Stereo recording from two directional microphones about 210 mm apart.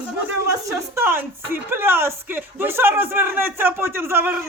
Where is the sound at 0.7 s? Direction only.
15° right (ahead or behind).